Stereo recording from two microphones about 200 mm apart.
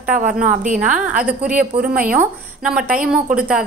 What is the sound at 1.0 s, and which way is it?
A woman's voice, 5° right (ahead or behind).